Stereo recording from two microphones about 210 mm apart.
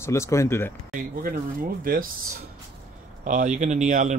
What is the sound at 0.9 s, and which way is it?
Speech, 40° right (ahead or behind).